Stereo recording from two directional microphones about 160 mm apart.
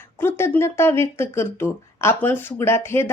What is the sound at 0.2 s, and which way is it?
A woman's voice, 15° left (ahead or behind).